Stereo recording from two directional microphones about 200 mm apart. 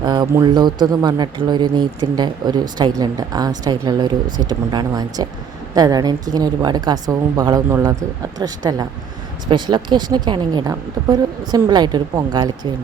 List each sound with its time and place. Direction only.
0.0 s speech: 20° right (ahead or behind)